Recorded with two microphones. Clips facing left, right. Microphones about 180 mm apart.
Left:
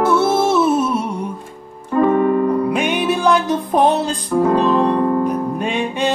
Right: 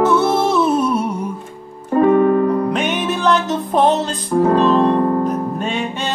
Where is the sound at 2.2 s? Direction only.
50° right (ahead or behind).